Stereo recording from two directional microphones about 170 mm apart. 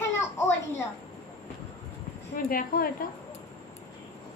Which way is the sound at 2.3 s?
55° left (ahead or behind).